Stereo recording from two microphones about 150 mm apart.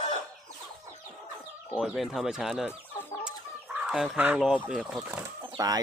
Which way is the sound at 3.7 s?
5° right (ahead or behind).